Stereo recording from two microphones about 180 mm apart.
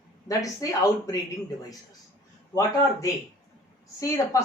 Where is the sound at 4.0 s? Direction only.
15° left (ahead or behind).